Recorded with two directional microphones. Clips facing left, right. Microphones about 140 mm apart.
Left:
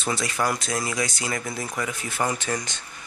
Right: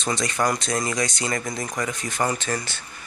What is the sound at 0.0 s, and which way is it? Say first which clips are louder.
Speech: right 2 dB; 5° left (ahead or behind).